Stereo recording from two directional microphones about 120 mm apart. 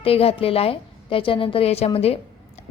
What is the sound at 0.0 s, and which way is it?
A woman's voice, 55° left (ahead or behind).